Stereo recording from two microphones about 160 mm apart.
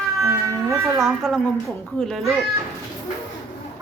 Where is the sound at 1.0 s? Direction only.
Centre (ahead or behind).